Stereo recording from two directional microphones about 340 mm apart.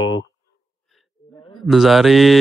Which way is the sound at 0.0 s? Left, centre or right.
Left.